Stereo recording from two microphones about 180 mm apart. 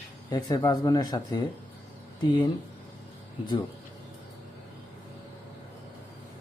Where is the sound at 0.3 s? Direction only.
25° left (ahead or behind).